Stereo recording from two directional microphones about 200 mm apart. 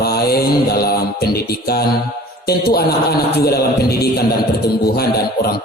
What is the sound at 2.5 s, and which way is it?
A man's voice, 50° left (ahead or behind).